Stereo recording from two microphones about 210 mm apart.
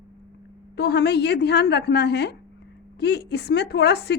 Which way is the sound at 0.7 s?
50° left (ahead or behind).